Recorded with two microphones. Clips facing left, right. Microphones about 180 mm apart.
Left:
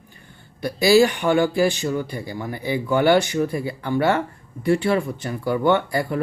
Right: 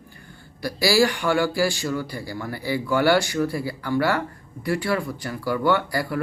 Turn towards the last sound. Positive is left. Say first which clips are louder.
# left 3 dB
turn(degrees=25)  # may be behind; listen again after turning